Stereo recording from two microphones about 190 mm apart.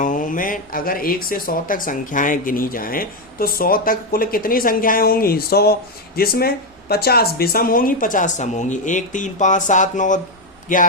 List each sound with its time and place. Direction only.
0.0 s speech: 45° left (ahead or behind)